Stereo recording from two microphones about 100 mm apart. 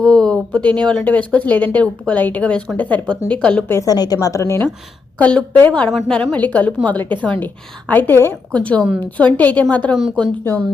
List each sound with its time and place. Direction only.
0.0 s speech: 5° left (ahead or behind)
3.7 s a woman's voice: 30° left (ahead or behind)
3.9 s a woman's voice: 40° left (ahead or behind)
5.1 s a woman's voice: 10° left (ahead or behind)